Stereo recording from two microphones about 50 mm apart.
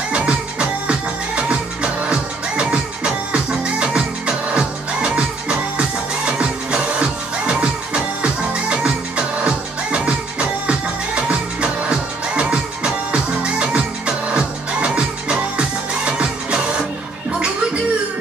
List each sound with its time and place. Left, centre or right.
0.1 s music: centre